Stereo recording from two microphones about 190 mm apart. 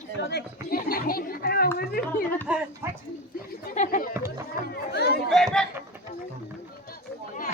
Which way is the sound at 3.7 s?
45° left (ahead or behind).